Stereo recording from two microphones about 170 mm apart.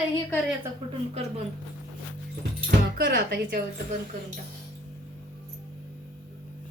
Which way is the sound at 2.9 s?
70° right (ahead or behind).